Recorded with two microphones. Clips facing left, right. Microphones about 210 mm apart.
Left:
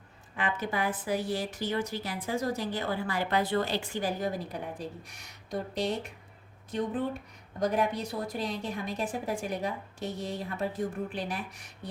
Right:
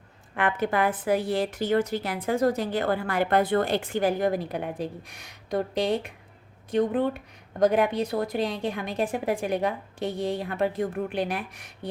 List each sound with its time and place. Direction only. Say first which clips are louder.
0.3 s a woman's voice: right 6 dB; 60° right (ahead or behind)